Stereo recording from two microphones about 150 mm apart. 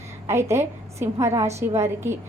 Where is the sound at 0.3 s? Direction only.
20° right (ahead or behind).